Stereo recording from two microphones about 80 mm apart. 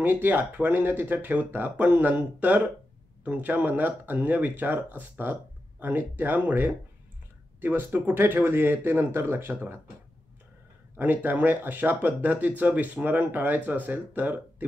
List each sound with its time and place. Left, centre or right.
0.0 s speech: right
11.0 s speech: right